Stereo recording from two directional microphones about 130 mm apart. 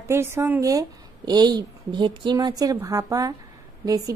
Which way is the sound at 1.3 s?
35° right (ahead or behind).